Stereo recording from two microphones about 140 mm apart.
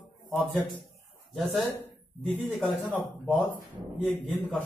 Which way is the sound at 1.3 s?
Centre (ahead or behind).